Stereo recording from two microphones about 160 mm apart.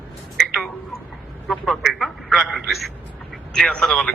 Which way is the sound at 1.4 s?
Centre (ahead or behind).